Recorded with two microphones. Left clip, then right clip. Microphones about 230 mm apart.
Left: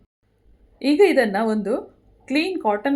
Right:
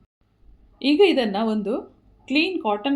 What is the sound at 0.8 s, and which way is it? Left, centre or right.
A woman's voice, centre.